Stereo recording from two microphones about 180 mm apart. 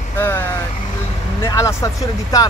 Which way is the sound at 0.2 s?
10° left (ahead or behind).